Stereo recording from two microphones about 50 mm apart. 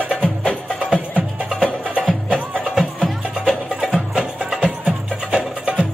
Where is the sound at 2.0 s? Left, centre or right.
Centre.